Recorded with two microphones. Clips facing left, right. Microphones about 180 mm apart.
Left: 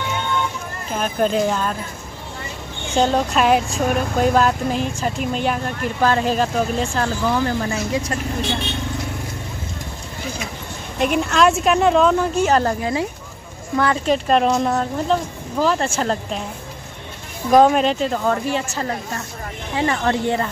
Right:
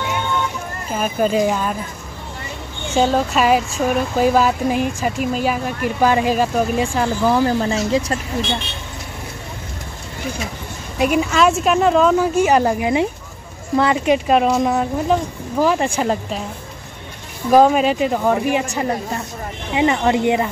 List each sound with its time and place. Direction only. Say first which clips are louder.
0.9 s a woman's voice: right 2 dB; 5° right (ahead or behind)
2.9 s speech: right 1 dB; 5° right (ahead or behind)
7.2 s speech: right 6 dB; 30° right (ahead or behind)
11.0 s a woman's voice: right 1 dB; 5° right (ahead or behind)
17.5 s speech: right 1 dB; 5° right (ahead or behind)